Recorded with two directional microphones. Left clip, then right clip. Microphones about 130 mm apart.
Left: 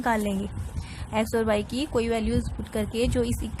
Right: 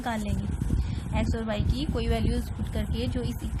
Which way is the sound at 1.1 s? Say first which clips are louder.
Left 7 dB; 55° left (ahead or behind).